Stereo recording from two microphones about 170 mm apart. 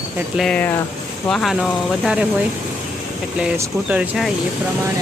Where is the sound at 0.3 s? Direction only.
5° left (ahead or behind).